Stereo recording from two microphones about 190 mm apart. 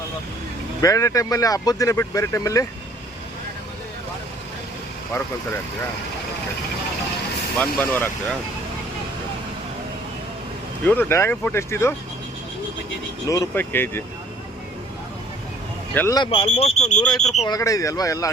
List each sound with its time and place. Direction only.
0.8 s speech: 15° left (ahead or behind)
7.6 s speech: 10° left (ahead or behind)
10.8 s speech: 10° left (ahead or behind)
13.2 s speech: 15° left (ahead or behind)
16.0 s speech: 20° left (ahead or behind); by 17.0 s 35° left (ahead or behind)
17.0 s speech: 5° left (ahead or behind)
17.4 s speech: 20° left (ahead or behind)